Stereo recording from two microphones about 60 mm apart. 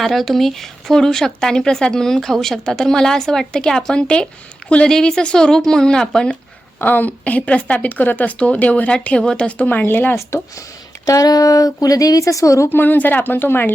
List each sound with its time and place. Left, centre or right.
0.0 s speech: centre
6.7 s speech: left
11.0 s a woman's voice: left
12.7 s speech: left